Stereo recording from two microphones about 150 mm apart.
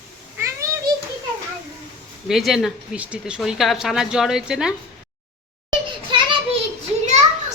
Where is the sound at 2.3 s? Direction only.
Centre (ahead or behind).